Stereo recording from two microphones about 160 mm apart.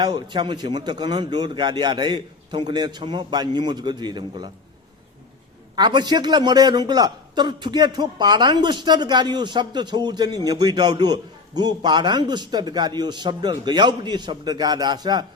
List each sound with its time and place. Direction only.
0.0 s a man's voice: 25° right (ahead or behind)
5.7 s a man's voice: 25° right (ahead or behind)